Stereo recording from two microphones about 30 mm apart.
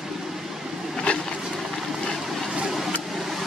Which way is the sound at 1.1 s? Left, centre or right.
Left.